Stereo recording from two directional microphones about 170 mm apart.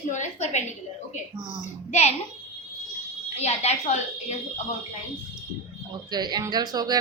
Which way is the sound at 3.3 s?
40° left (ahead or behind).